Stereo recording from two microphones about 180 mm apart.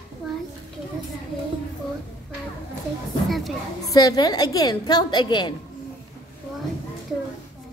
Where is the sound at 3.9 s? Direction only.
20° left (ahead or behind).